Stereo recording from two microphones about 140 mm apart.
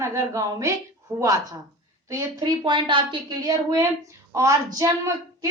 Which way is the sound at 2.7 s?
35° right (ahead or behind).